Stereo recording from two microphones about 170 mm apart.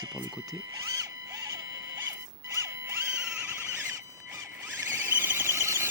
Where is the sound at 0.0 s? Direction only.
20° right (ahead or behind).